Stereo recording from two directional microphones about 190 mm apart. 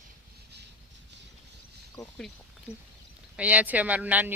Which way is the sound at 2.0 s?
20° left (ahead or behind).